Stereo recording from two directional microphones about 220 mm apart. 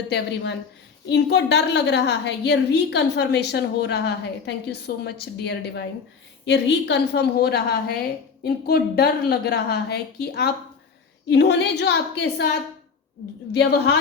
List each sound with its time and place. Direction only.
1.1 s a woman's voice: 50° left (ahead or behind)
13.5 s a woman's voice: 50° left (ahead or behind)